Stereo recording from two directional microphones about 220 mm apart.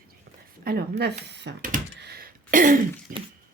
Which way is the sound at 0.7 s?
45° right (ahead or behind).